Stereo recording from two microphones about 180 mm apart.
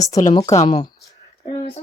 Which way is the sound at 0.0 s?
20° left (ahead or behind).